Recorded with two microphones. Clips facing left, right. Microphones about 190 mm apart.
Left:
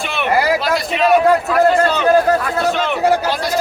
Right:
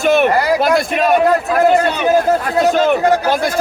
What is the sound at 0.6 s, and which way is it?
Speech, 50° right (ahead or behind).